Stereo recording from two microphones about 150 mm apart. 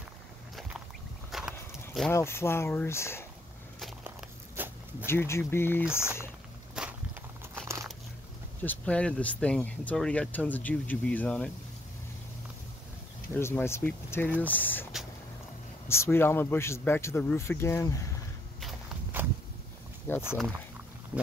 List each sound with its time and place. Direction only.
1.3 s a sound: centre (ahead or behind)
2.1 s speech: 15° left (ahead or behind)
4.6 s zipper: 15° right (ahead or behind)
5.0 s speech: 15° left (ahead or behind)
6.8 s walk: 5° right (ahead or behind)
7.5 s crunch: 20° right (ahead or behind)
8.6 s speech: 10° left (ahead or behind)
13.3 s speech: 15° left (ahead or behind)
15.9 s speech: 15° left (ahead or behind)
19.1 s a sound: 10° right (ahead or behind)
20.1 s speech: 15° left (ahead or behind)